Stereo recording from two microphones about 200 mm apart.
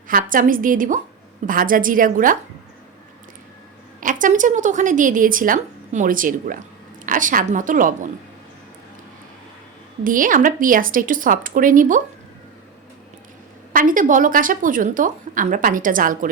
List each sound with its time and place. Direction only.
0.1 s a woman's voice: 45° right (ahead or behind)
4.0 s a woman's voice: 40° right (ahead or behind)
10.0 s a woman's voice: 45° right (ahead or behind)
13.7 s a woman's voice: 40° right (ahead or behind)